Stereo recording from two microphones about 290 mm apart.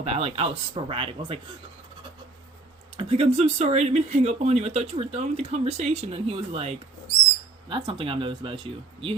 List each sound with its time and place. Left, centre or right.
0.0 s speech: right
3.0 s speech: centre
7.7 s speech: centre